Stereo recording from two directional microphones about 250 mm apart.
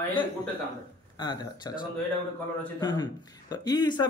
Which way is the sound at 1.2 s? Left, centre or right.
Centre.